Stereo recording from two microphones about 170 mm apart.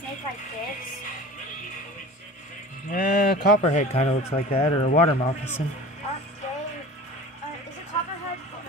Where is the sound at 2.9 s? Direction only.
60° left (ahead or behind).